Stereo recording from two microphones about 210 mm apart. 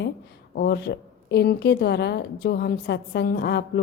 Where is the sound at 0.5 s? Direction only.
50° left (ahead or behind).